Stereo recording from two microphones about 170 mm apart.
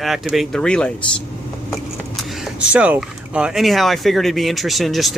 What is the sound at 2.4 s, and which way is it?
Speech, 5° right (ahead or behind).